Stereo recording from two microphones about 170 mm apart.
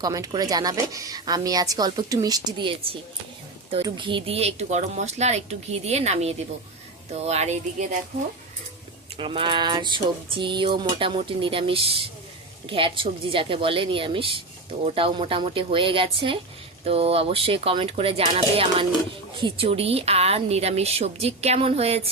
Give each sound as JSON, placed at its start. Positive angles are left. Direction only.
{"t": 0.0, "sound": "a woman's voice", "side_deg": -20}
{"t": 3.8, "sound": "dishes", "side_deg": -30}
{"t": 9.1, "sound": "dishes", "side_deg": -30}